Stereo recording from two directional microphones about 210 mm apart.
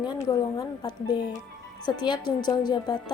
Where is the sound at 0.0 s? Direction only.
20° left (ahead or behind).